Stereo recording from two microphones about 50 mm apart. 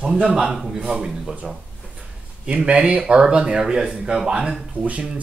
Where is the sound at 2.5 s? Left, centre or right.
Right.